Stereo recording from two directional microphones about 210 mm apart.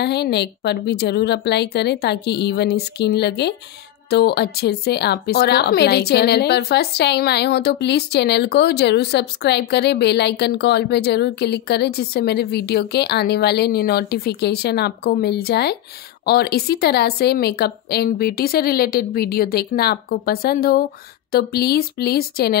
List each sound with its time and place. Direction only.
0.0 s a woman's voice: 50° left (ahead or behind)